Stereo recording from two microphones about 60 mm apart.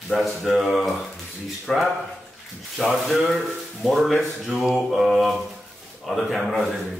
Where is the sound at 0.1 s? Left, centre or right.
Centre.